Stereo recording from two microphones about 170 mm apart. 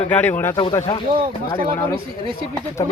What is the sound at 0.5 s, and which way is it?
Speech, 30° left (ahead or behind).